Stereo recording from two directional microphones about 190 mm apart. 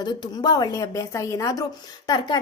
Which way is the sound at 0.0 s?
20° left (ahead or behind).